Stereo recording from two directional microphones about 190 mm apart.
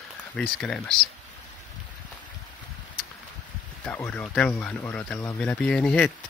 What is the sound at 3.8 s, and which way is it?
Speech, 10° left (ahead or behind).